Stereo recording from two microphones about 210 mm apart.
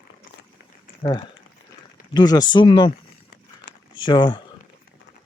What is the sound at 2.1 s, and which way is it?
Speech, 20° left (ahead or behind).